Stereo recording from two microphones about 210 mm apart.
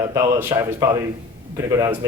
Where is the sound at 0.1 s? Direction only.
15° right (ahead or behind).